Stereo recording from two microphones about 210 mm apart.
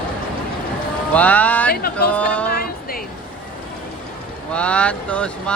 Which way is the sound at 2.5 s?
45° left (ahead or behind).